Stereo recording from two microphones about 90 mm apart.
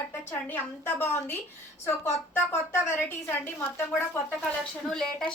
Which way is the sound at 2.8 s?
25° left (ahead or behind).